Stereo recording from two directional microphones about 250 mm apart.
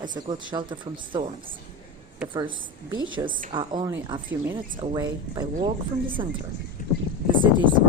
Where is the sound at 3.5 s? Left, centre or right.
Centre.